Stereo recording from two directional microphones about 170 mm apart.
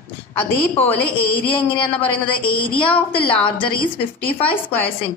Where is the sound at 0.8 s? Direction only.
10° left (ahead or behind).